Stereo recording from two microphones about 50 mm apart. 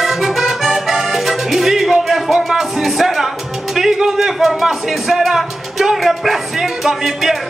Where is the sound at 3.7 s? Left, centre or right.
Centre.